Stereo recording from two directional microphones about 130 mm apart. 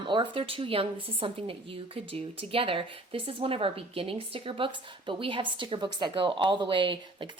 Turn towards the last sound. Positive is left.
turn(degrees=-40)  # may be behind; listen again after turning